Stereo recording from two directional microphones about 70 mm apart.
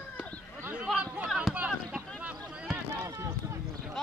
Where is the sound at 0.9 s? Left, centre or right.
Centre.